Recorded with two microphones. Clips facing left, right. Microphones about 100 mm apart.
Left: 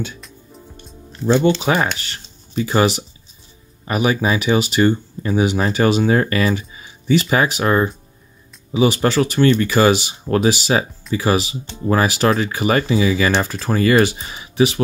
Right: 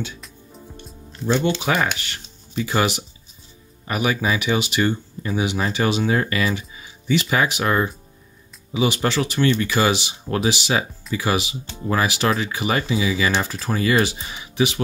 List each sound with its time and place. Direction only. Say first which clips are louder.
0.2 s music: left 1 dB; centre (ahead or behind)
1.6 s speech: left 3 dB; 35° left (ahead or behind)